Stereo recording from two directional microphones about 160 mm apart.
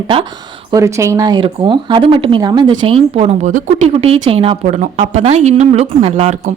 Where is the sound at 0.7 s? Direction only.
20° right (ahead or behind); by 6.3 s 40° right (ahead or behind).